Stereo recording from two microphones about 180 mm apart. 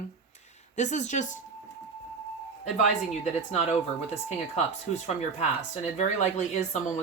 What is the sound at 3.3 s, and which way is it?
Speech, 40° left (ahead or behind).